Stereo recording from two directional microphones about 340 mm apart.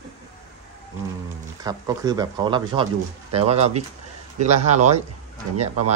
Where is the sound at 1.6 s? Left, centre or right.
Centre.